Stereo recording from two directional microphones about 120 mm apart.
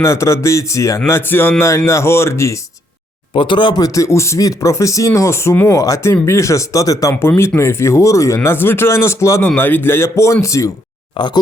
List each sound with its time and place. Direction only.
0.0 s speech: 25° left (ahead or behind)
3.3 s speech: 45° left (ahead or behind); by 10.7 s 25° left (ahead or behind)
11.2 s speech: 40° left (ahead or behind)